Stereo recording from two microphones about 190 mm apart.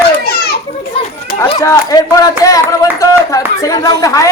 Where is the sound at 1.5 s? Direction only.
20° left (ahead or behind).